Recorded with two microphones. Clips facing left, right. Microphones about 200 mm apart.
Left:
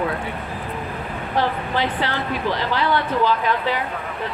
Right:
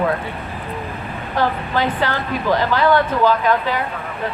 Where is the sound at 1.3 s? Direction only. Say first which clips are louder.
Right 2 dB; 45° right (ahead or behind).